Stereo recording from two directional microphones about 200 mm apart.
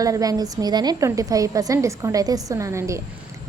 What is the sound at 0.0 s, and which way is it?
A woman's voice, 15° right (ahead or behind).